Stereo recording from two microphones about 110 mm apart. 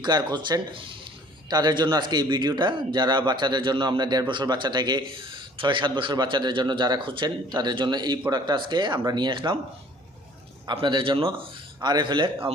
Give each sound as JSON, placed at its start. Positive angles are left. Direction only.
{"t": 0.0, "sound": "a man's voice", "side_deg": -40}
{"t": 1.5, "sound": "a man's voice", "side_deg": -40}
{"t": 10.7, "sound": "a man's voice", "side_deg": -45}